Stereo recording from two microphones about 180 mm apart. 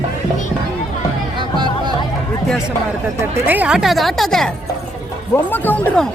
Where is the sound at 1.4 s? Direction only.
25° right (ahead or behind).